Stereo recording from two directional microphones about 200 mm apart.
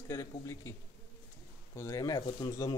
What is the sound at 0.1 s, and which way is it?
Speech, 15° left (ahead or behind).